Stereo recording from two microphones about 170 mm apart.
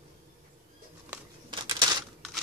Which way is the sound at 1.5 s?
25° right (ahead or behind).